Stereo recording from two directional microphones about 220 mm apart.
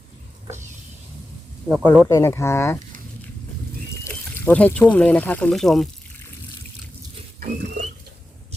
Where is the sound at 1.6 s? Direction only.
5° left (ahead or behind).